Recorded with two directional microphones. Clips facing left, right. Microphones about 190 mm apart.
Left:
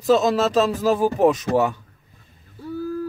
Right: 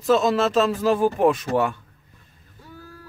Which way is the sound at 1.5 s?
25° left (ahead or behind).